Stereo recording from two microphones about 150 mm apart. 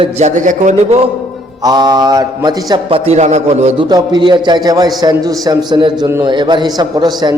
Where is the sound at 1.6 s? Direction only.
25° right (ahead or behind).